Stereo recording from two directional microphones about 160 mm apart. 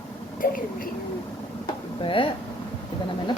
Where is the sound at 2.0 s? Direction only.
35° left (ahead or behind).